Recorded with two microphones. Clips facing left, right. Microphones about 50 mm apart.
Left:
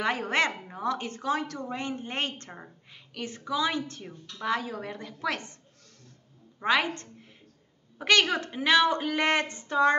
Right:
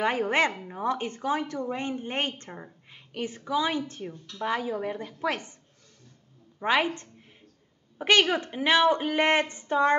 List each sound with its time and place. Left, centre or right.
0.0 s a woman's voice: centre
6.6 s speech: centre